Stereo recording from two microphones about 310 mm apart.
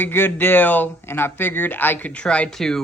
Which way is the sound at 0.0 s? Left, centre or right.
Centre.